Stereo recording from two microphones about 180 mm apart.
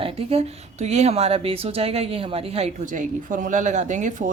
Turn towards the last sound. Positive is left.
turn(degrees=-45)  # may be behind; listen again after turning